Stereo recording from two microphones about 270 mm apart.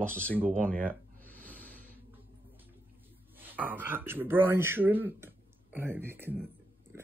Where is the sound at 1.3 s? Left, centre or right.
Centre.